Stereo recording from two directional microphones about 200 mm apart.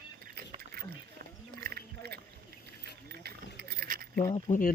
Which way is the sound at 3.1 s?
55° right (ahead or behind).